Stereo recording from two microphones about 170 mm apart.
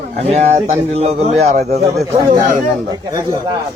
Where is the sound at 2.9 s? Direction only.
25° right (ahead or behind).